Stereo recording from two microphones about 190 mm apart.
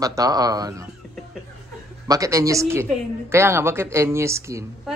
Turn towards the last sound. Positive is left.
turn(degrees=-15)  # may be behind; listen again after turning